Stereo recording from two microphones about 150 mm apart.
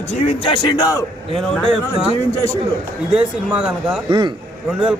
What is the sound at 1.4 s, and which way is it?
A man's voice, 5° left (ahead or behind).